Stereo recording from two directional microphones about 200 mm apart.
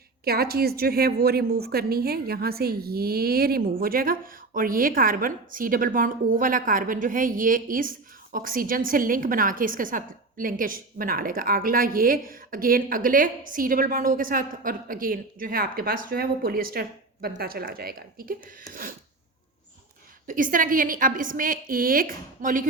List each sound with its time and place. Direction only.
0.3 s a woman's voice: 50° right (ahead or behind)
20.2 s a woman's voice: 40° right (ahead or behind)